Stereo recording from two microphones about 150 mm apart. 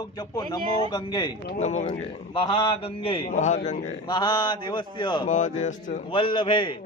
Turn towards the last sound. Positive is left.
turn(degrees=35)  # may be behind; listen again after turning